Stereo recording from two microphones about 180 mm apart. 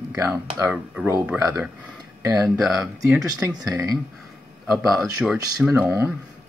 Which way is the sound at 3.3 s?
20° right (ahead or behind).